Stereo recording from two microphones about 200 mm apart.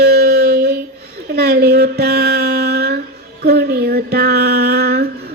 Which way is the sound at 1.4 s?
50° right (ahead or behind).